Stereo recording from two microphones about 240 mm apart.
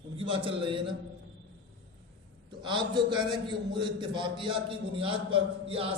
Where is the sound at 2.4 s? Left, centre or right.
Centre.